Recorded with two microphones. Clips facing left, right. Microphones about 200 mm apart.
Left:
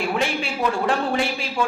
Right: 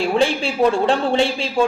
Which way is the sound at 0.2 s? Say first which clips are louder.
Right 7 dB; 30° right (ahead or behind).